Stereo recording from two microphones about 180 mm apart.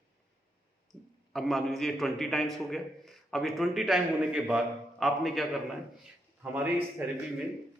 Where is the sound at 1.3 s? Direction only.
Centre (ahead or behind).